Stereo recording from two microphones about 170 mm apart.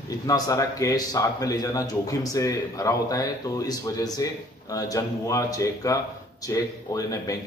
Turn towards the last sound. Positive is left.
turn(degrees=20)  # may be behind; listen again after turning